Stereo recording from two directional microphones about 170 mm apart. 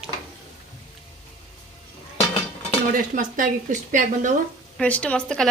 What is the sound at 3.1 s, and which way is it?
A woman's voice, 50° right (ahead or behind).